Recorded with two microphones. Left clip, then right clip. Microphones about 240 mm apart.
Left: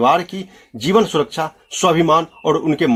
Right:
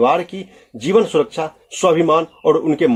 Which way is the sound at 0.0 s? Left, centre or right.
Left.